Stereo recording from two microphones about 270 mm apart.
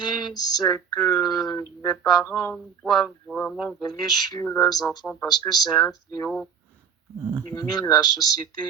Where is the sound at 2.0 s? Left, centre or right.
Centre.